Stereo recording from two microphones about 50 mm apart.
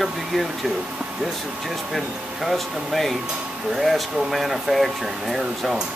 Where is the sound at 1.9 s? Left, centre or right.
Centre.